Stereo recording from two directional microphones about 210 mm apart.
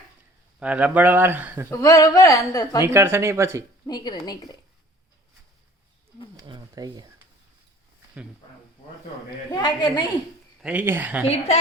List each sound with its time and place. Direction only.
0.6 s speech: 5° right (ahead or behind)
1.7 s a woman's voice: 15° left (ahead or behind)
2.8 s speech: 10° right (ahead or behind)
3.8 s a woman's voice: 20° left (ahead or behind)
6.3 s speech: 20° right (ahead or behind)
9.5 s a woman's voice: 20° left (ahead or behind)
10.6 s speech: 5° right (ahead or behind)
11.3 s a woman's voice: 30° left (ahead or behind)